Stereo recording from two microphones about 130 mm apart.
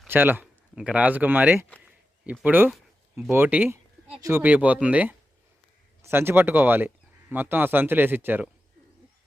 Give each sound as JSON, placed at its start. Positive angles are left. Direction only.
{"t": 0.1, "sound": "speech", "side_deg": -15}